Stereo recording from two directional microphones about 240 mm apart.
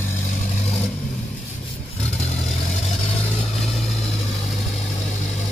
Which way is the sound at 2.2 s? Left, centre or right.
Left.